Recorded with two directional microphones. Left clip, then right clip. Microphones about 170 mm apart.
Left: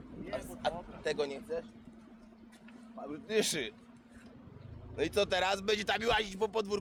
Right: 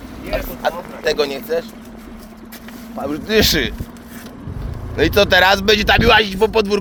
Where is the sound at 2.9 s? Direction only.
5° right (ahead or behind).